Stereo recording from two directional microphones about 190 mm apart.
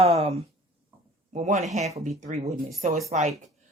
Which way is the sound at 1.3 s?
35° right (ahead or behind).